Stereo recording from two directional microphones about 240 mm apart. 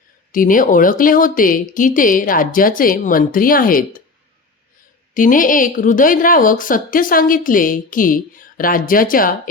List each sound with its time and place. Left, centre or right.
0.3 s a woman's voice: left
5.1 s a woman's voice: left